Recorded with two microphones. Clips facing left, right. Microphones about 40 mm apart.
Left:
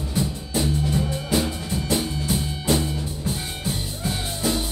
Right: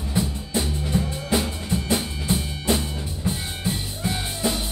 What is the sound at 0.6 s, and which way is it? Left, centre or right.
Music, centre.